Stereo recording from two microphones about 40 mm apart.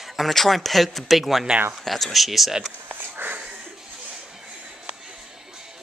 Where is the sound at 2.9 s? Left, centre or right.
Right.